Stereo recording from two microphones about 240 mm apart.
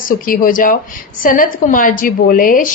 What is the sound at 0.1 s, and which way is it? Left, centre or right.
A woman's voice, left.